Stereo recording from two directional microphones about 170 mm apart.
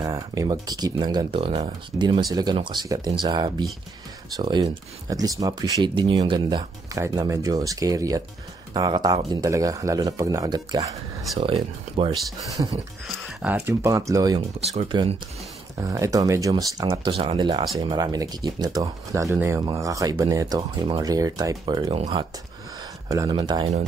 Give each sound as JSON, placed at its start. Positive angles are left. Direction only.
{"t": 0.0, "sound": "speech", "side_deg": -20}
{"t": 11.3, "sound": "speech", "side_deg": -35}
{"t": 13.0, "sound": "speech", "side_deg": -5}
{"t": 14.7, "sound": "speech", "side_deg": -40}
{"t": 15.8, "sound": "speech", "side_deg": -20}
{"t": 21.9, "sound": "speech", "side_deg": -35}
{"t": 23.0, "sound": "speech", "side_deg": -20}